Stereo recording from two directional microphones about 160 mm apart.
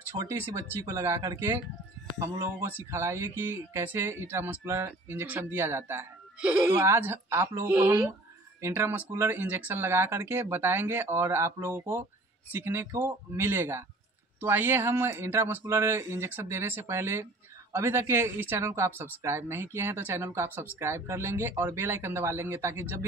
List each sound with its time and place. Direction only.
0.1 s speech: 15° right (ahead or behind)